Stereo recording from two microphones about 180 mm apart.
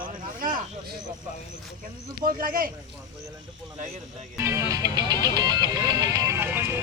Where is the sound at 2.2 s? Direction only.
50° right (ahead or behind).